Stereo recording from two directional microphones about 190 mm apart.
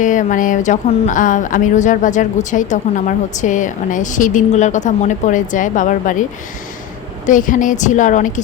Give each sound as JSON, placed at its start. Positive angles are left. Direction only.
{"t": 0.0, "sound": "speech", "side_deg": 40}
{"t": 7.3, "sound": "a woman's voice", "side_deg": 45}